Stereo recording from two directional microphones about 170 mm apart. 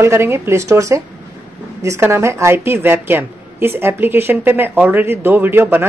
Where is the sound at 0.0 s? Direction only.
15° right (ahead or behind).